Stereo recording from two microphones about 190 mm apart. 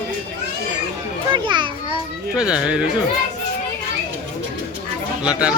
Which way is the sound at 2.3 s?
5° right (ahead or behind).